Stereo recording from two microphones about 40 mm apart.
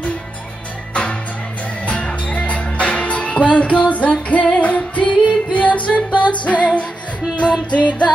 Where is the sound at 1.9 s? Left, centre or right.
Left.